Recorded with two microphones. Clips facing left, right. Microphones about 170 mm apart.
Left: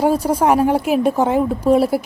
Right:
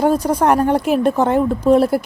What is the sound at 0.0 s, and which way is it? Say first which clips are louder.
A woman's voice: right 1 dB; 5° left (ahead or behind).